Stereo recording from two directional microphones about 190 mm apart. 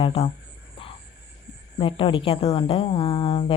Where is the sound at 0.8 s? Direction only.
30° left (ahead or behind).